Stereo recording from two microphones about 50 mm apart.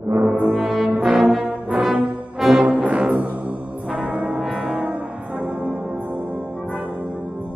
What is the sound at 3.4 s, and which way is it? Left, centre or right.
Music, centre.